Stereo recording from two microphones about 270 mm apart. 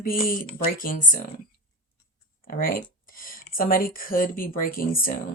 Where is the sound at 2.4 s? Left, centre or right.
Left.